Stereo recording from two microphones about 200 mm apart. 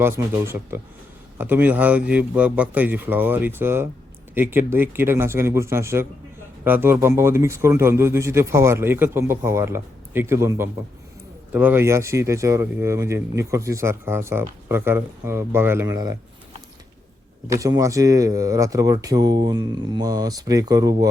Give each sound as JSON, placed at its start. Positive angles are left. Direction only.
{"t": 0.0, "sound": "speech", "side_deg": -10}
{"t": 17.5, "sound": "speech", "side_deg": -15}